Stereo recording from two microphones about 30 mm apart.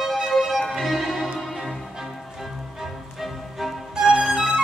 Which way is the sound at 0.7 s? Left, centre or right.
Centre.